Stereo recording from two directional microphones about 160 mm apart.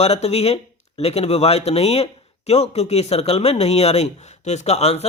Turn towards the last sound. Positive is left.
turn(degrees=40)  # may be behind; listen again after turning